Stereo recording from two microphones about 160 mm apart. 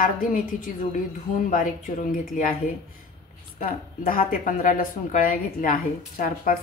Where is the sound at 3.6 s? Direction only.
60° left (ahead or behind).